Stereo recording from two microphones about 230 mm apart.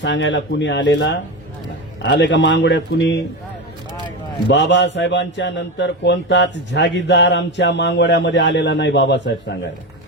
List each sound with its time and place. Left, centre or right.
0.0 s a man's voice: left
4.4 s a man's voice: left